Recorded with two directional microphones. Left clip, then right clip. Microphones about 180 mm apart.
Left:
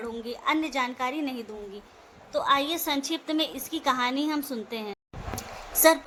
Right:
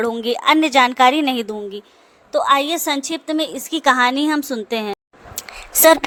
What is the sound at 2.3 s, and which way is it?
A woman's voice, 45° right (ahead or behind).